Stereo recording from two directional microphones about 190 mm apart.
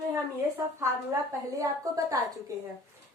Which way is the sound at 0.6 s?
15° right (ahead or behind).